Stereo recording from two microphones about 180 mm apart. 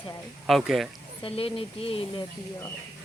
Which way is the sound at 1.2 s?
30° left (ahead or behind).